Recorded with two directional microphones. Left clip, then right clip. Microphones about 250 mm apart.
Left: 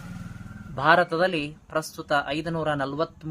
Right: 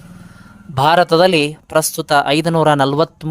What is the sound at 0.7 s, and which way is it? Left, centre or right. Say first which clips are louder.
Speech: right 8 dB; right.